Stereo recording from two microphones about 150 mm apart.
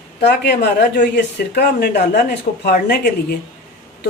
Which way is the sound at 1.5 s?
85° left.